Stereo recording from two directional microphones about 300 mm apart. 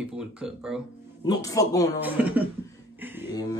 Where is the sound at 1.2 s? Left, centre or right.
Centre.